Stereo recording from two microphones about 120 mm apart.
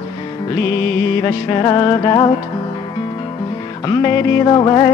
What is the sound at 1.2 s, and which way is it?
Speech, 30° left (ahead or behind).